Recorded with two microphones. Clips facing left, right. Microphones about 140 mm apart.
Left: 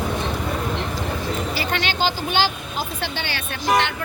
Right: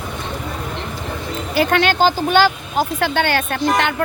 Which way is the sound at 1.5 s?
50° right (ahead or behind).